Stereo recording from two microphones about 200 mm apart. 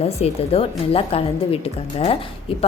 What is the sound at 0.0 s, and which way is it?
A woman's voice, 30° left (ahead or behind).